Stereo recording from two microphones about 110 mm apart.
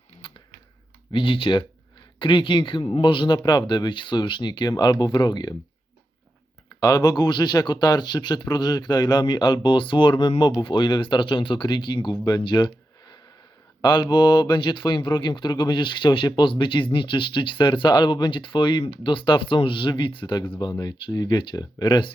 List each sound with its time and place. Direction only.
0.2 s a sound: 50° left (ahead or behind)
1.1 s speech: 55° left (ahead or behind)
6.7 s speech: 35° left (ahead or behind)